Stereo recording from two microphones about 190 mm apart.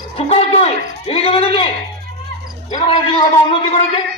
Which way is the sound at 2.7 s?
25° left (ahead or behind).